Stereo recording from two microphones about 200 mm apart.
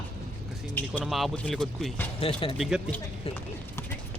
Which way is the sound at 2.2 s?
25° left (ahead or behind).